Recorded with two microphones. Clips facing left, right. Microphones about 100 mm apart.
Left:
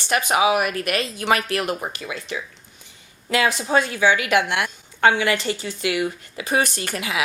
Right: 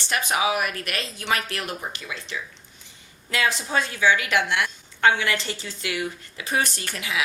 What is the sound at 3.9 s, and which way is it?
Speech, 50° left (ahead or behind).